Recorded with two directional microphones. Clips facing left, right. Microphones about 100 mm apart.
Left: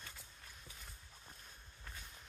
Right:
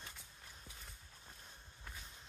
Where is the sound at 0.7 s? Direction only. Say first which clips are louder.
Even; centre (ahead or behind).